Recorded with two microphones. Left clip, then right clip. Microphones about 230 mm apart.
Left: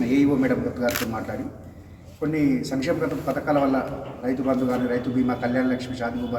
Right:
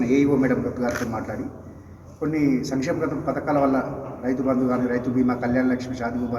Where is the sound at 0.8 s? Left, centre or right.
Left.